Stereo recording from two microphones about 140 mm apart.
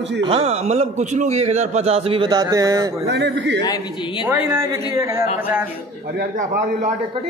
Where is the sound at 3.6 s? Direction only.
30° left (ahead or behind).